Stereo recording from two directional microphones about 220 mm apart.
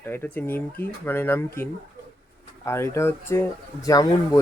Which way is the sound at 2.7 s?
10° left (ahead or behind).